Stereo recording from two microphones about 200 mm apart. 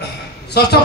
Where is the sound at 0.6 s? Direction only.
55° left (ahead or behind).